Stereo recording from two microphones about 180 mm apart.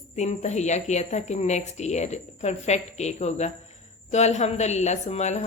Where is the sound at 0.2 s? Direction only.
40° left (ahead or behind).